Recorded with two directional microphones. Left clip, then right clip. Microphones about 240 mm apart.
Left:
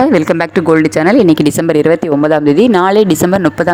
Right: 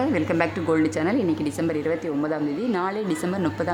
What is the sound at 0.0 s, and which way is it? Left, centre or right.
Speech, left.